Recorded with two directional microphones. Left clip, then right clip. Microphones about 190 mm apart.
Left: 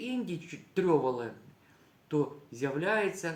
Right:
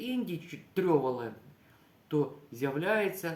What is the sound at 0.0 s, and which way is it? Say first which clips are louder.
Speech: right 1 dB; 15° right (ahead or behind).